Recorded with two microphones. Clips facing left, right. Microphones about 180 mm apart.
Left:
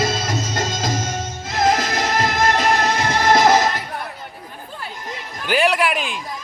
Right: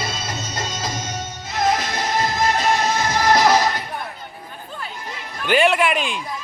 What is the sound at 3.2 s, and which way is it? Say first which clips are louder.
Neigh: left 2 dB; 25° left (ahead or behind).